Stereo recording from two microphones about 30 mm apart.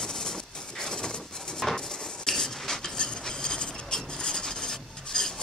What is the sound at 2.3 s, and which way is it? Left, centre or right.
Cutlery, centre.